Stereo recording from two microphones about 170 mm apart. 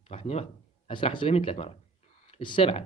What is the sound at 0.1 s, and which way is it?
Speech, 35° left (ahead or behind).